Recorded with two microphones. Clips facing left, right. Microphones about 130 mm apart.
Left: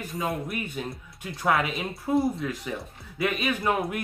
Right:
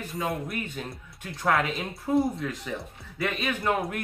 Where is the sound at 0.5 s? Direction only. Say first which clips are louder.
Left 2 dB; 10° left (ahead or behind).